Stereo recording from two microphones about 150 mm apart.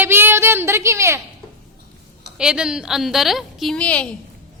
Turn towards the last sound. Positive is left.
turn(degrees=10)  # may be behind; listen again after turning